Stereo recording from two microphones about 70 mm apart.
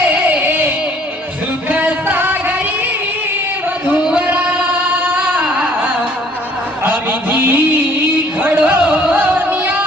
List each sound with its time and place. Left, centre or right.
0.1 s music: right
1.7 s music: right
4.0 s a sound: centre
8.4 s music: right